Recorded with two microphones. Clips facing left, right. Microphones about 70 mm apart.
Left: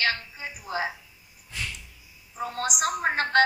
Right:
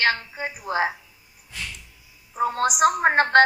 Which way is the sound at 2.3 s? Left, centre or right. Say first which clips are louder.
Right 8 dB; right.